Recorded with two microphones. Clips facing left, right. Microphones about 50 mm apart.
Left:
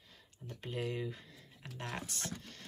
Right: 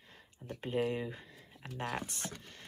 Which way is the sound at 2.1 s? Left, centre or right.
Centre.